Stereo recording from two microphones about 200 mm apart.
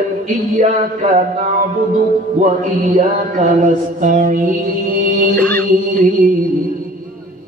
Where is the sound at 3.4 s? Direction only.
40° right (ahead or behind).